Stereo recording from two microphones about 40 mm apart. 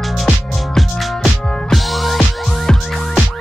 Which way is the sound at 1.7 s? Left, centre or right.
Centre.